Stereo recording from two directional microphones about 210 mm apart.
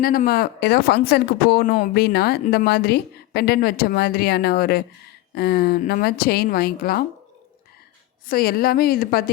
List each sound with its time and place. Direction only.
0.0 s speech: 45° left (ahead or behind)
8.3 s speech: 45° left (ahead or behind)